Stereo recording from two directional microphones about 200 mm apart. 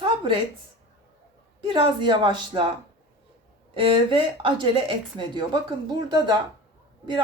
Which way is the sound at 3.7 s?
25° right (ahead or behind).